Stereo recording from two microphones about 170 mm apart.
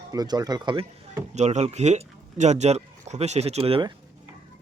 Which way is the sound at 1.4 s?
40° right (ahead or behind).